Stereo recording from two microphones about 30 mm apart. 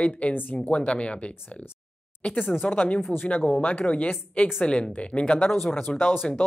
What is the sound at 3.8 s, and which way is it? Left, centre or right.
Speech, left.